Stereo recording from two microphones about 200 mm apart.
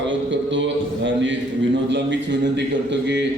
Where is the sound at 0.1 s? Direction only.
65° right (ahead or behind).